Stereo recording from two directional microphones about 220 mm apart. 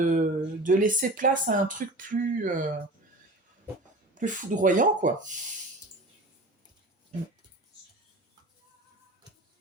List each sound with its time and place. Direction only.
0.1 s speech: 40° right (ahead or behind)
4.1 s speech: 35° right (ahead or behind)